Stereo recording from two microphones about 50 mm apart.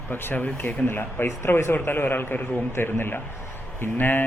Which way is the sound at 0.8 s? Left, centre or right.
Left.